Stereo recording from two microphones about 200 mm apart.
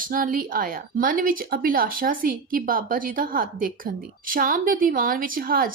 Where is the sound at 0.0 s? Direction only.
45° right (ahead or behind).